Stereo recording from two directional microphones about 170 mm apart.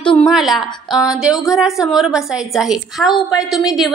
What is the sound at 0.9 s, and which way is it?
Speech, 20° left (ahead or behind).